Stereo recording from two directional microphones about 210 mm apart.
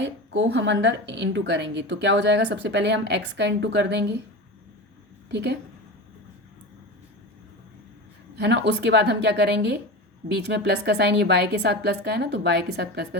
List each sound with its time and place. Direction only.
0.0 s a woman's voice: 60° right (ahead or behind)
5.3 s a woman's voice: 55° right (ahead or behind)
8.4 s a woman's voice: 55° right (ahead or behind)